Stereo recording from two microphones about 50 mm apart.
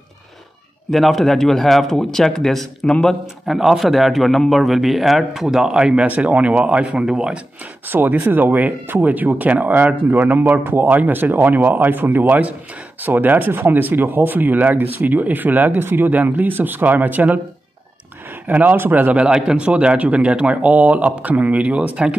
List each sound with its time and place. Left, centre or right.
0.9 s a man's voice: centre
3.4 s a man's voice: centre
6.0 s a man's voice: right
8.1 s speech: right
16.1 s speech: right
18.5 s speech: right
19.1 s a man's voice: centre